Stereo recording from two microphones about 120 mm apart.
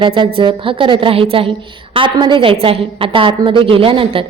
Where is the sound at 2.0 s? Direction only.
40° right (ahead or behind).